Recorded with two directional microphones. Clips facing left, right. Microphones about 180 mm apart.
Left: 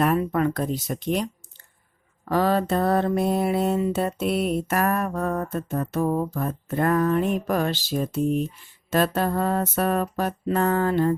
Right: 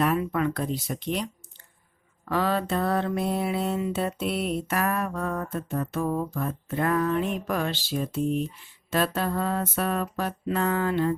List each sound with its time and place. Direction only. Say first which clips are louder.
0.0 s mantra: left 3 dB; 40° left (ahead or behind)